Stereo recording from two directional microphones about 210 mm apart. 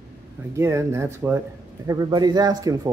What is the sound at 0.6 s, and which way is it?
Speech, 15° right (ahead or behind).